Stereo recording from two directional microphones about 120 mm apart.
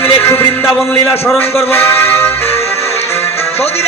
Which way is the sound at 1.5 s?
20° left (ahead or behind).